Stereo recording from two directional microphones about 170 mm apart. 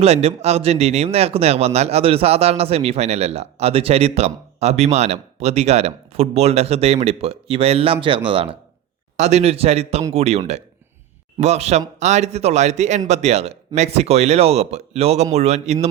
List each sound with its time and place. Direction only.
0.0 s speech: 35° right (ahead or behind)
9.1 s speech: 40° right (ahead or behind)